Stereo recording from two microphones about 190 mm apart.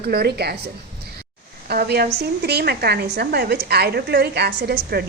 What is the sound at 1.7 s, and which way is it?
A woman's voice, 55° right (ahead or behind).